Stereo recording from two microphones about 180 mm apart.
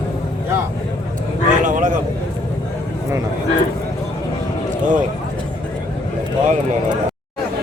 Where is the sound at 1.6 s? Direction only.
45° right (ahead or behind).